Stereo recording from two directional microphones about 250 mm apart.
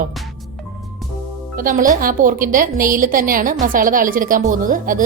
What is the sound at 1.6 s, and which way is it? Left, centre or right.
A woman's voice, right.